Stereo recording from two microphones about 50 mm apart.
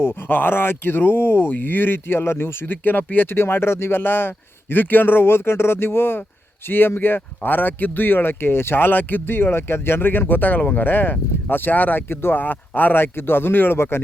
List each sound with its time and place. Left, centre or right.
0.0 s speech: left